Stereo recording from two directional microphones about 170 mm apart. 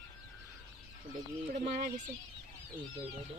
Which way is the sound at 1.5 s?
45° right (ahead or behind).